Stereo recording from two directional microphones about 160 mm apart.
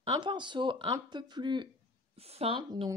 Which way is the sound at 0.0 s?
30° right (ahead or behind).